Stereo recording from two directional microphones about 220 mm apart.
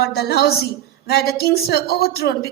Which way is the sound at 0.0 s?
45° left (ahead or behind).